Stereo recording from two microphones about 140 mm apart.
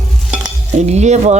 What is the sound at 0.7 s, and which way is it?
Cutlery, 50° right (ahead or behind).